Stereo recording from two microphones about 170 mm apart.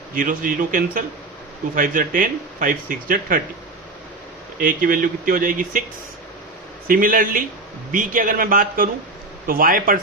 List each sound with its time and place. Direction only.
0.1 s speech: 55° right (ahead or behind)
4.6 s speech: 55° right (ahead or behind)
6.8 s a man's voice: 55° right (ahead or behind)